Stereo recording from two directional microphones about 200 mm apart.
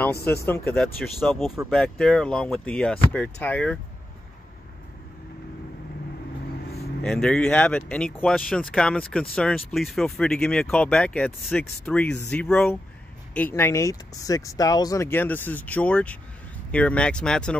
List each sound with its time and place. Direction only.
0.2 s speech: 50° left (ahead or behind)
0.5 s speech: 5° left (ahead or behind)
7.0 s speech: 5° left (ahead or behind)